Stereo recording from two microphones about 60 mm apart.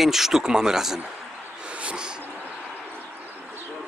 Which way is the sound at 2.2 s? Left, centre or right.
Right.